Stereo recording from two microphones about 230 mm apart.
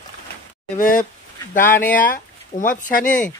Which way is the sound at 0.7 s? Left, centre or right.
Left.